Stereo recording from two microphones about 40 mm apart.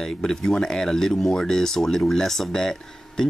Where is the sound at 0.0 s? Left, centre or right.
Centre.